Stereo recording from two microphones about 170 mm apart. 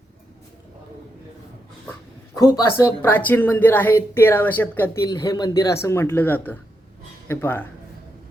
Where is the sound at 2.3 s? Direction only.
20° left (ahead or behind).